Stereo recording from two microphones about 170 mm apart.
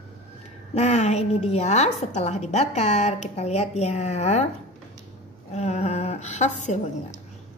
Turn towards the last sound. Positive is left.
turn(degrees=45)  # may be behind; listen again after turning